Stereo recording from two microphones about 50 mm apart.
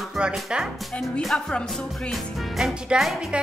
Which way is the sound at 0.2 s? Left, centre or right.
Centre.